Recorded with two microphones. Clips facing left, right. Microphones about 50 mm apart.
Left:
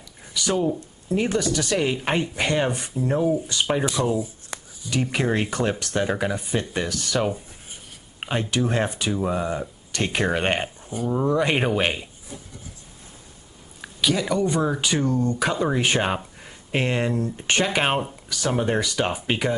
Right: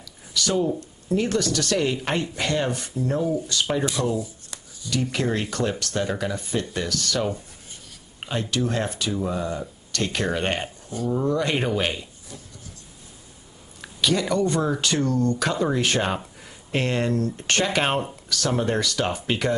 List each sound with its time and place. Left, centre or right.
0.3 s speech: centre
13.7 s speech: centre